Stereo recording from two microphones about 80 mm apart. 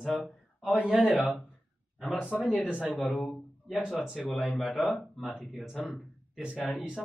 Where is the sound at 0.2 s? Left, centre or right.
Centre.